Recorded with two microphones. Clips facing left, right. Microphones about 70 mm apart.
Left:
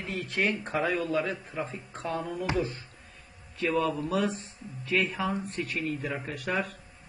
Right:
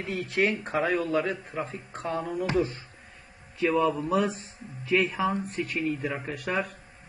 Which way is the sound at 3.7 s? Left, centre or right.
Centre.